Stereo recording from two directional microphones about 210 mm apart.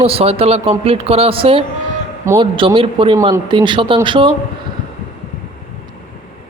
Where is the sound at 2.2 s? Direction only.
15° right (ahead or behind).